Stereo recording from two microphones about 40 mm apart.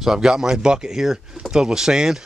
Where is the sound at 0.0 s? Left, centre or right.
Centre.